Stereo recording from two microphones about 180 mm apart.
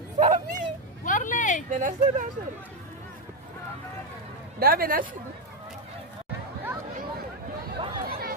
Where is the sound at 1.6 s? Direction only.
45° right (ahead or behind).